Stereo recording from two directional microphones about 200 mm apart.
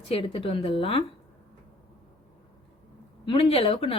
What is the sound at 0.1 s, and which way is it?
Speech, 30° left (ahead or behind).